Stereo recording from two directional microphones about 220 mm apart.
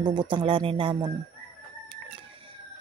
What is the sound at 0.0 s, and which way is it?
Speech, 20° right (ahead or behind).